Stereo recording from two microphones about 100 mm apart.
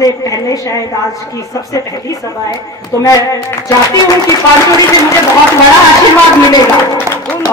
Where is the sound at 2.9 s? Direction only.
35° left (ahead or behind).